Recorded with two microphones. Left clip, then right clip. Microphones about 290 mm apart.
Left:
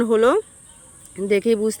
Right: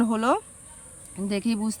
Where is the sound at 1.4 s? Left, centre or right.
Right.